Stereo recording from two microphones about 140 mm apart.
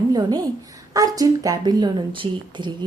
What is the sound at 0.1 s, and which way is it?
A woman's voice, 30° right (ahead or behind).